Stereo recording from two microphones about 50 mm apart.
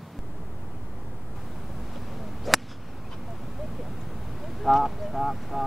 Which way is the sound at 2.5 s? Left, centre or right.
Centre.